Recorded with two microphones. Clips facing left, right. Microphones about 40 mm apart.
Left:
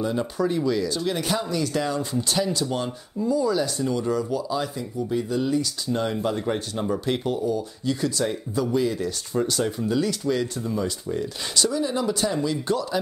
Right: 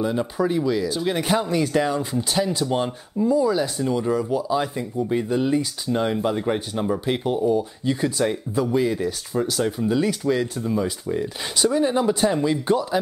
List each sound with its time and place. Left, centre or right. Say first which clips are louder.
0.0 s speech: right 2 dB; centre
9.3 s speech: even; centre; by 13.0 s right